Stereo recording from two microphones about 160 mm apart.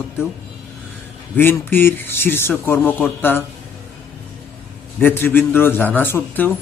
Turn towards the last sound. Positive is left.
turn(degrees=10)  # may be behind; listen again after turning